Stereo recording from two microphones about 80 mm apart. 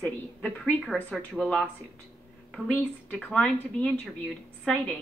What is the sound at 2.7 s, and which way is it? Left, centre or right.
Speech, centre.